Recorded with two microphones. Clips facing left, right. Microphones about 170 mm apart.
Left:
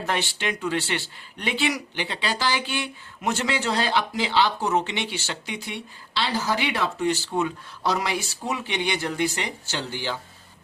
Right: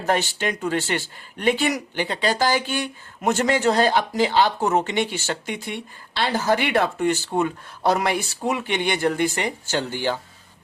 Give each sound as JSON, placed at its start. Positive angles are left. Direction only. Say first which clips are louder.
{"t": 0.0, "sound": "speech", "louder": "right 5 dB", "side_deg": -45}